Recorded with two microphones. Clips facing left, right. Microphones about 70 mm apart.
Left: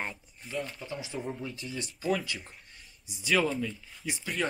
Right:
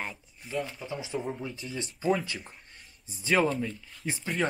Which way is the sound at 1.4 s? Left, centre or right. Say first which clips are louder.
Right 1 dB; centre.